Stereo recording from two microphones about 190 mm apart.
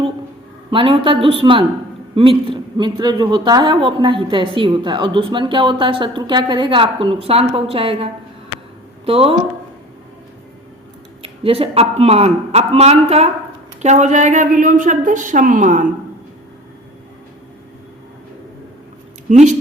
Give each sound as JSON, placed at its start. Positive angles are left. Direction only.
{"t": 0.7, "sound": "a man's voice", "side_deg": -25}
{"t": 11.2, "sound": "a man's voice", "side_deg": -30}
{"t": 19.3, "sound": "a man's voice", "side_deg": -40}